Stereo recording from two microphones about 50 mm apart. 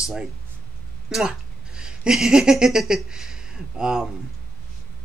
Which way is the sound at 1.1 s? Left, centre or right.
Centre.